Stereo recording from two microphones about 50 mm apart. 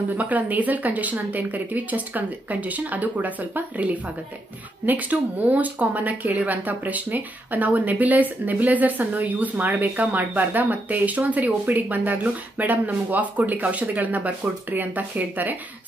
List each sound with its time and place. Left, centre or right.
0.1 s speech: right